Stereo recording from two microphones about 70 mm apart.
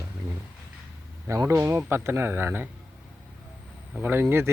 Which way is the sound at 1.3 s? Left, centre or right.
Right.